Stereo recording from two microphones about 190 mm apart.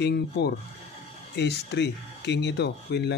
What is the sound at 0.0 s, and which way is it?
Speech, 60° left (ahead or behind).